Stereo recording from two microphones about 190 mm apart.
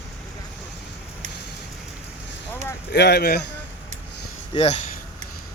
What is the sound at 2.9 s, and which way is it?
Speech, 60° left (ahead or behind).